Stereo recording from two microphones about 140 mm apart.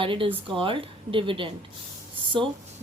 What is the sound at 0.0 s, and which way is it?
A woman's voice, 40° right (ahead or behind).